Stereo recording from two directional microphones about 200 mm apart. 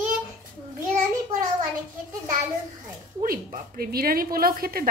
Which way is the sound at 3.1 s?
45° right (ahead or behind).